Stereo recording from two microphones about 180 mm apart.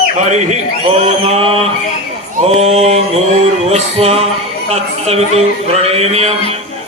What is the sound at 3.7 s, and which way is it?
Music, 35° right (ahead or behind).